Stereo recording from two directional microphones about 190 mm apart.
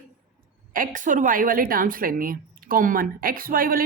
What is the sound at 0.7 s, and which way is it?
Speech, 45° right (ahead or behind).